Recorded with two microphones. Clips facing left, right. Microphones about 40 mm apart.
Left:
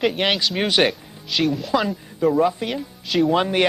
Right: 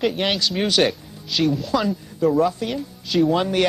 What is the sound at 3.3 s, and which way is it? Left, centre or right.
Speech, left.